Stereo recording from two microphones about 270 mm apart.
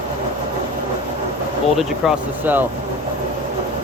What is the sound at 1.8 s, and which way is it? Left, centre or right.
Speech, centre.